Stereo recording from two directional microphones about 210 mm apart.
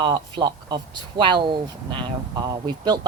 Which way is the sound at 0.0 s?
20° right (ahead or behind).